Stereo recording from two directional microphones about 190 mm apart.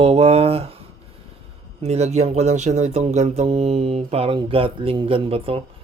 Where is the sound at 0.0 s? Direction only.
30° right (ahead or behind).